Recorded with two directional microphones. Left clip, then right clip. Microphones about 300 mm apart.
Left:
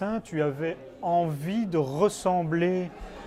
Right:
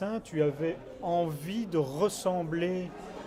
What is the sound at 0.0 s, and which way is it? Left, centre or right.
Speech, left.